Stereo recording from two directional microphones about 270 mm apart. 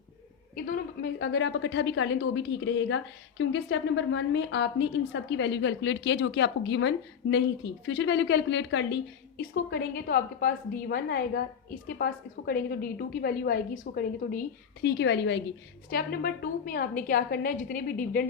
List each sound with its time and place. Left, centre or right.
0.5 s a woman's voice: left